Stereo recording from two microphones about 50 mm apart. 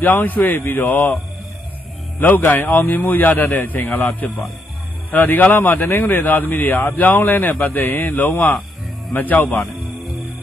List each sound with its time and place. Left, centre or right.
0.0 s a man's voice: left
2.1 s a man's voice: left